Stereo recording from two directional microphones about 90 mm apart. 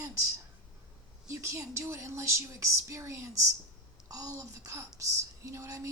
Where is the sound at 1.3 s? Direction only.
30° right (ahead or behind).